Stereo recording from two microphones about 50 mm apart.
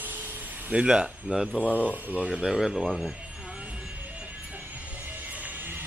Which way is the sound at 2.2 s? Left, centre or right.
Centre.